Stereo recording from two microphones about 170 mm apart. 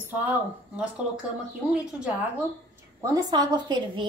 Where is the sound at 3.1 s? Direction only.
25° right (ahead or behind).